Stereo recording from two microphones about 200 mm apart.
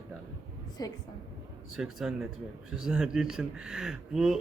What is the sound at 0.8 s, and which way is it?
Speech, 20° left (ahead or behind).